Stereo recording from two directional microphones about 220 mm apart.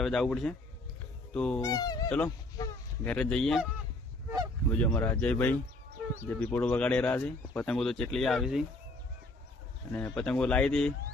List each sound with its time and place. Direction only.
0.0 s speech: centre (ahead or behind)
1.6 s speech: 15° left (ahead or behind)
2.0 s speech: 5° left (ahead or behind)
2.6 s goose: 10° left (ahead or behind)
4.7 s speech: 10° left (ahead or behind)
9.9 s speech: 5° left (ahead or behind)